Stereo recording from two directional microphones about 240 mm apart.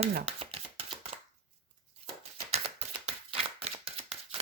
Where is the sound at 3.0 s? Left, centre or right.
Right.